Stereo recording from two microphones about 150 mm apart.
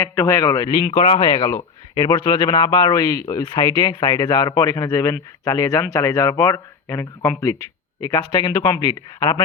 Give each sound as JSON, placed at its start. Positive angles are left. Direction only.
{"t": 0.0, "sound": "a man's voice", "side_deg": 20}
{"t": 0.9, "sound": "speech", "side_deg": 40}
{"t": 1.4, "sound": "a man's voice", "side_deg": 20}